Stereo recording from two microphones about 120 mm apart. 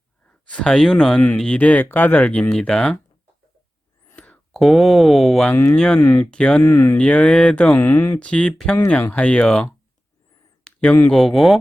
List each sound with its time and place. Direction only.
0.4 s speech: 5° left (ahead or behind)
4.1 s speech: 10° left (ahead or behind)
5.5 s speech: 20° left (ahead or behind)
5.7 s speech: 5° left (ahead or behind)
6.0 s speech: 20° left (ahead or behind)
6.3 s speech: 10° left (ahead or behind)
6.6 s speech: 20° left (ahead or behind)
6.9 s speech: 10° left (ahead or behind)
8.2 s speech: 10° left (ahead or behind)
10.6 s a sound: 10° left (ahead or behind)
11.1 s speech: centre (ahead or behind)